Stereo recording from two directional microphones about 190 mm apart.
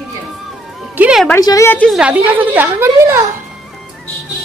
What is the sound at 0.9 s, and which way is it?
Music, 5° right (ahead or behind).